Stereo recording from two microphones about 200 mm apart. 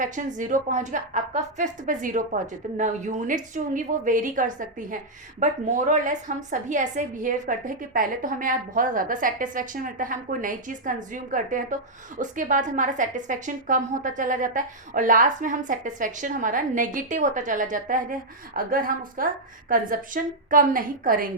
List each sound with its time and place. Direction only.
0.0 s a woman's voice: 40° right (ahead or behind)